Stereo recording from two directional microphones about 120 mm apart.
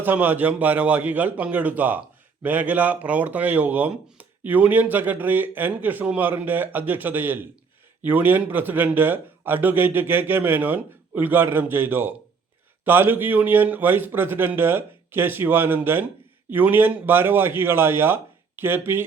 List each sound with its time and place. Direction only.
0.0 s speech: 15° right (ahead or behind)